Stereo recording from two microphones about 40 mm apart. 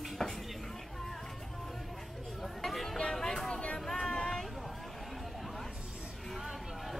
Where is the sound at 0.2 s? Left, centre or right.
Centre.